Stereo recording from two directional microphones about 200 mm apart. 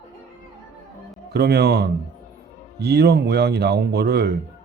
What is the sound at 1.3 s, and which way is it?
Speech, 55° right (ahead or behind).